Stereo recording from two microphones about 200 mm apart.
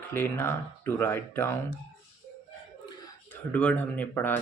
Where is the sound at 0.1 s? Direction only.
10° left (ahead or behind).